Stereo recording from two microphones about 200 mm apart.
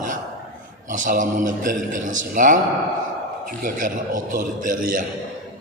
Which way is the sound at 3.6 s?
40° right (ahead or behind).